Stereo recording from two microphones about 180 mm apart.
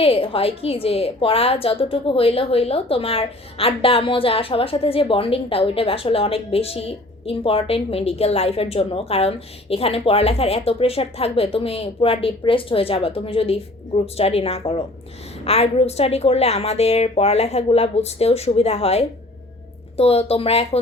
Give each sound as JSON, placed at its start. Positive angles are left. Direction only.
{"t": 0.0, "sound": "a woman's voice", "side_deg": 30}